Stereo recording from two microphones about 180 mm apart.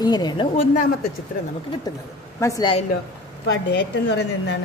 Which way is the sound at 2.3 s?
15° left (ahead or behind).